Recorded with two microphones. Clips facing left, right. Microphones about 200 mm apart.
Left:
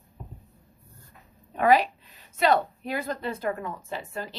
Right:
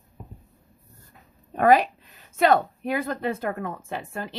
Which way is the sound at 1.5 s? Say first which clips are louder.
Right 3 dB; 45° right (ahead or behind).